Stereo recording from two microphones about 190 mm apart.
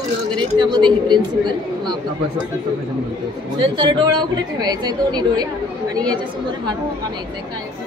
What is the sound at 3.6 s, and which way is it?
A woman's voice, 25° right (ahead or behind).